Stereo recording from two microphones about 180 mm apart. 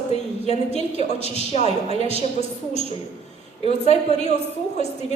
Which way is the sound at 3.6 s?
35° left (ahead or behind).